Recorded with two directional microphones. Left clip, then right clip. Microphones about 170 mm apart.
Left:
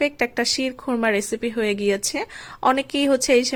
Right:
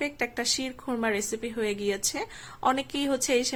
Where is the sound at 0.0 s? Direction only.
30° left (ahead or behind).